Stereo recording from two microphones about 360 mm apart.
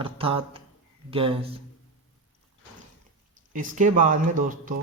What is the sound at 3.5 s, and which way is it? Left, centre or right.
Speech, right.